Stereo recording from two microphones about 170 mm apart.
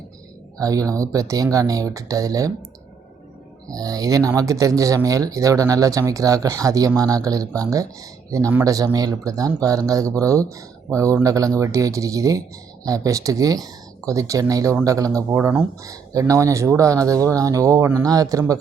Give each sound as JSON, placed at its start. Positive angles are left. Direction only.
{"t": 0.6, "sound": "speech", "side_deg": -20}
{"t": 3.7, "sound": "speech", "side_deg": -20}